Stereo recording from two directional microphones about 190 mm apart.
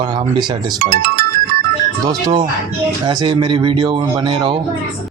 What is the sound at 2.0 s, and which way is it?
Speech, 25° right (ahead or behind).